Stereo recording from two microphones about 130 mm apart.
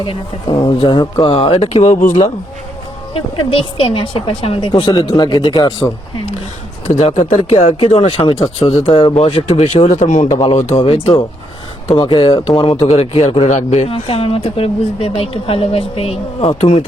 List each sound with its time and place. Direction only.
0.0 s speech: 40° left (ahead or behind); by 2.1 s 65° left (ahead or behind)
3.5 s a woman's voice: 45° left (ahead or behind)
7.0 s speech: 60° left (ahead or behind)
7.5 s speech: 45° left (ahead or behind)
9.9 s a man's voice: 70° left (ahead or behind)
10.4 s speech: 60° left (ahead or behind)
11.9 s a woman's voice: 40° left (ahead or behind)